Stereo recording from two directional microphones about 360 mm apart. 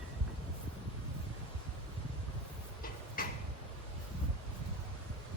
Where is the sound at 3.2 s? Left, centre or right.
Left.